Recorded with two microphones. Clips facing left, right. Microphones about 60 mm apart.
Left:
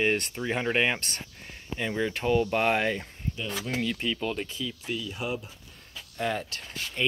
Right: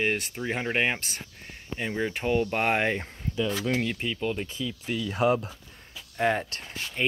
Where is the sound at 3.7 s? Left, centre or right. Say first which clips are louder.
Right 2 dB; right.